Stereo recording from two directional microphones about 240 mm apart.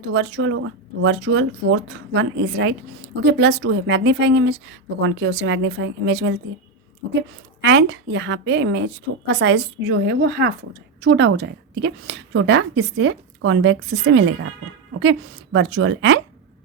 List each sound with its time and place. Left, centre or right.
0.1 s a woman's voice: right
7.6 s a woman's voice: right
15.5 s a woman's voice: right